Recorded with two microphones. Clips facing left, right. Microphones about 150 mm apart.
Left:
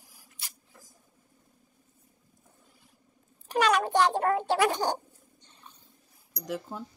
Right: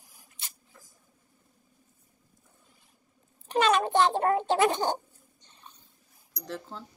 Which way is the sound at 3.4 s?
20° right (ahead or behind).